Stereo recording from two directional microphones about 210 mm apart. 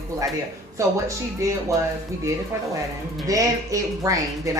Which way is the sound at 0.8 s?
15° right (ahead or behind).